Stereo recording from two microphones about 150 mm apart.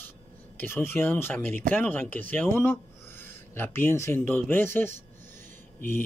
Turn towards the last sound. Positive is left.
turn(degrees=15)  # may be behind; listen again after turning